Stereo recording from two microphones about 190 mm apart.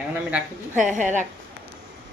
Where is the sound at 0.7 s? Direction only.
40° right (ahead or behind).